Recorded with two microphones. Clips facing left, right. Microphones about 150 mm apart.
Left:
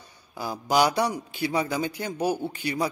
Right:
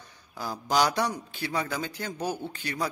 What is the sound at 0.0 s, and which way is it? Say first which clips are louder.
A man's voice: left 3 dB; 10° left (ahead or behind).